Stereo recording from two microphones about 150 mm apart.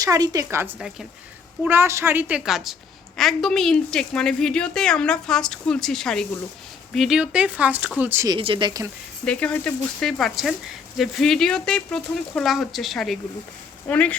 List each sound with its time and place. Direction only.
0.0 s a woman's voice: 25° right (ahead or behind)
0.8 s a woman's voice: 5° right (ahead or behind)
1.6 s a woman's voice: 15° right (ahead or behind)
8.4 s speech: 35° right (ahead or behind)
9.2 s a woman's voice: 10° left (ahead or behind)